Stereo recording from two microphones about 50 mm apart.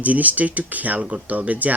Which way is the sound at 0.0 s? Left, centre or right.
Right.